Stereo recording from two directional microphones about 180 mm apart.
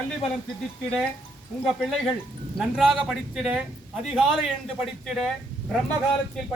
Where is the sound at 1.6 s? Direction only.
Centre (ahead or behind).